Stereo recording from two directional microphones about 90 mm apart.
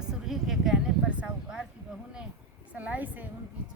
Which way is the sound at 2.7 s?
15° right (ahead or behind).